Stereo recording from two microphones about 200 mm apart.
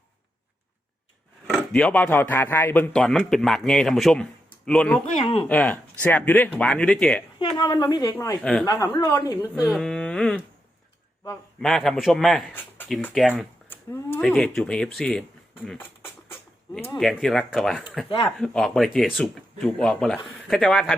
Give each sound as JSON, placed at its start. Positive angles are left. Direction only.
{"t": 1.7, "sound": "a man's voice", "side_deg": 5}
{"t": 5.2, "sound": "a woman's voice", "side_deg": 25}
{"t": 5.5, "sound": "a man's voice", "side_deg": 5}
{"t": 7.3, "sound": "a woman's voice", "side_deg": 20}
{"t": 8.4, "sound": "a man's voice", "side_deg": 5}
{"t": 8.6, "sound": "speech", "side_deg": 15}
{"t": 9.6, "sound": "speech", "side_deg": -10}
{"t": 9.8, "sound": "speech", "side_deg": 5}
{"t": 11.6, "sound": "a man's voice", "side_deg": 0}
{"t": 13.7, "sound": "a sound", "side_deg": 10}
{"t": 14.3, "sound": "a man's voice", "side_deg": 0}
{"t": 15.8, "sound": "a sound", "side_deg": 10}
{"t": 17.0, "sound": "a man's voice", "side_deg": 0}